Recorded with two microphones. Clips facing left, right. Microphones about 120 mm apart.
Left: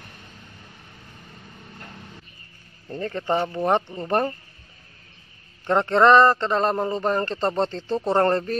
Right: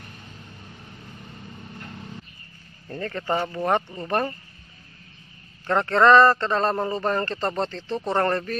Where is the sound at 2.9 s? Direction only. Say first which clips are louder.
Left 2 dB; 20° left (ahead or behind).